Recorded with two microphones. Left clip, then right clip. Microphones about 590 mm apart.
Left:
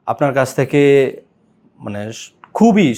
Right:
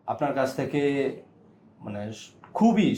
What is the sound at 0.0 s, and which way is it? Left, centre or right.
Speech, left.